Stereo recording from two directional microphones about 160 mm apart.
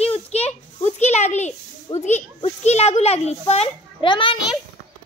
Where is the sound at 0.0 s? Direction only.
40° left (ahead or behind).